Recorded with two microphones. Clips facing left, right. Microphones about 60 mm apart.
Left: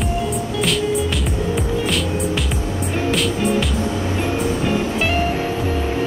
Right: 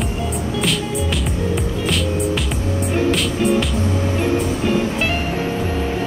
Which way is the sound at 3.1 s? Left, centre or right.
Centre.